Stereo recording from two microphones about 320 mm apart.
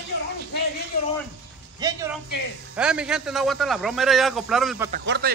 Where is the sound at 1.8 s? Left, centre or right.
Centre.